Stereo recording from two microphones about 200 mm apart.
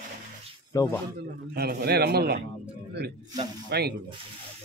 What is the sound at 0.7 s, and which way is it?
Speech, 15° left (ahead or behind).